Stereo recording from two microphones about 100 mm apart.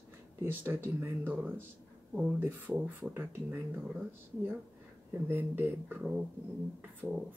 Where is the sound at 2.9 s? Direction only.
20° right (ahead or behind).